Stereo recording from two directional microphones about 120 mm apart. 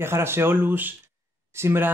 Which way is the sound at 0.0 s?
20° right (ahead or behind).